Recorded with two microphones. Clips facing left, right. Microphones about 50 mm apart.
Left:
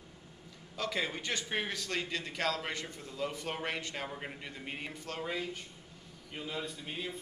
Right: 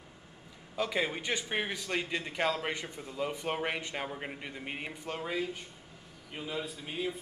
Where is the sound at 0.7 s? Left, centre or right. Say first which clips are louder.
Right 3 dB; centre.